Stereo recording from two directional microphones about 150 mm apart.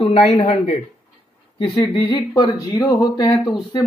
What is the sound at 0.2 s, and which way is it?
Speech, 45° left (ahead or behind).